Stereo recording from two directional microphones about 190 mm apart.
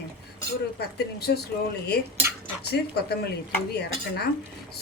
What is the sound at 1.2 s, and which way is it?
Speech, 55° left (ahead or behind).